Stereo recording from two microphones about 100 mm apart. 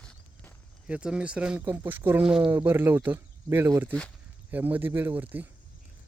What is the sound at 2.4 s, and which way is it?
Speech, 20° right (ahead or behind).